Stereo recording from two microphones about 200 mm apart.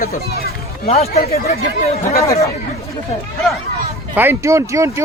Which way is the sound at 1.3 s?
50° left (ahead or behind).